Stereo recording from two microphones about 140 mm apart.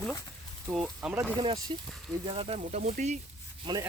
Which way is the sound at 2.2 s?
40° right (ahead or behind).